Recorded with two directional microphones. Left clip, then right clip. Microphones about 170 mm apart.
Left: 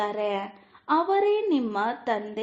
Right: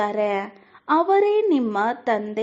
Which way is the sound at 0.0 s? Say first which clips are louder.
Right 5 dB; 40° right (ahead or behind).